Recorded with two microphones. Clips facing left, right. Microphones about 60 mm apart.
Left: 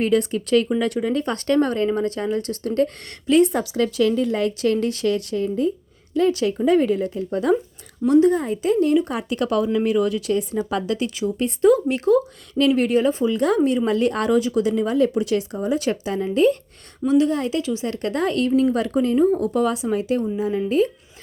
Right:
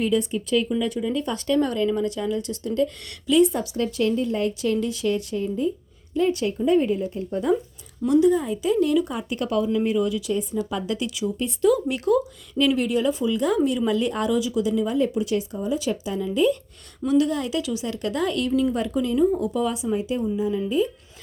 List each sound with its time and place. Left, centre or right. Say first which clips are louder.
0.0 s speech: left 3 dB; left
0.8 s speech: left 3 dB; left
3.0 s speech: left 1 dB; left
3.5 s speech: left 4 dB; left
8.0 s speech: left 2 dB; left
9.0 s speech: left 4 dB; left
9.6 s speech: left 3 dB; left
11.0 s speech: left 3 dB; left
11.7 s speech: left 3 dB; left
12.5 s speech: left 3 dB; left
17.1 s speech: left 3 dB; left
18.7 s speech: left 4 dB; left
18.9 s speech: left 3 dB; left
20.4 s speech: left 3 dB; left